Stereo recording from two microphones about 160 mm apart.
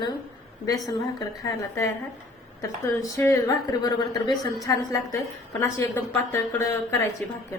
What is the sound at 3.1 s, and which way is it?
Speech, 20° left (ahead or behind).